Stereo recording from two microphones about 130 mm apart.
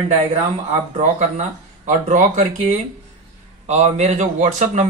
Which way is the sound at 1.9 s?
65° right (ahead or behind).